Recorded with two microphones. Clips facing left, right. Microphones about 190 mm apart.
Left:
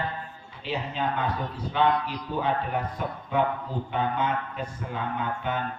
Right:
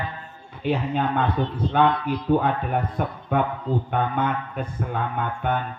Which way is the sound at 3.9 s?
55° right (ahead or behind).